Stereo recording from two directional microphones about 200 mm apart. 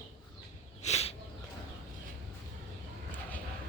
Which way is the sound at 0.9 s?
30° left (ahead or behind).